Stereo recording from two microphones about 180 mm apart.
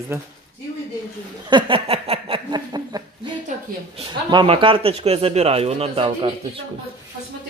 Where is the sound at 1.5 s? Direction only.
30° right (ahead or behind).